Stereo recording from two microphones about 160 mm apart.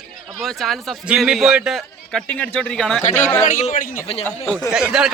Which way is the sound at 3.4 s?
50° left (ahead or behind).